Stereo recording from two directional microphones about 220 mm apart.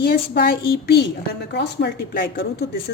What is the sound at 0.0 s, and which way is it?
Speech, 40° left (ahead or behind).